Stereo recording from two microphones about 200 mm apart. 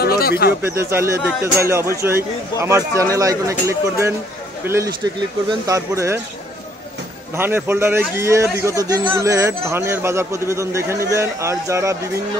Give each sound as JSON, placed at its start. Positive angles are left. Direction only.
{"t": 0.2, "sound": "speech", "side_deg": 50}
{"t": 0.6, "sound": "speech", "side_deg": -10}
{"t": 7.3, "sound": "speech", "side_deg": -10}